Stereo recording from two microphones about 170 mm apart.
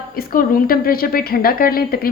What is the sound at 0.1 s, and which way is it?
A woman's voice, 60° left (ahead or behind).